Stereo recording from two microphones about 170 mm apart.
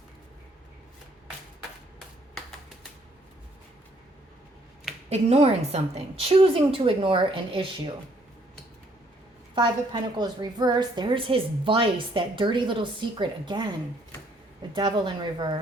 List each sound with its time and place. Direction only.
5.0 s a woman's voice: 35° right (ahead or behind)
9.6 s a woman's voice: 25° right (ahead or behind)
14.8 s a woman's voice: 25° right (ahead or behind)